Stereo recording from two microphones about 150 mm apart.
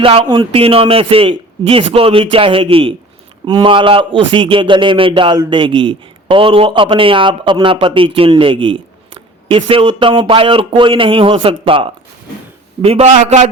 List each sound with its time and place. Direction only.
0.0 s a man's voice: 35° right (ahead or behind); by 13.5 s 50° right (ahead or behind)